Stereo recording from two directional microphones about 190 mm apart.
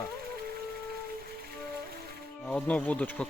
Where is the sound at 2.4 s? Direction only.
5° left (ahead or behind).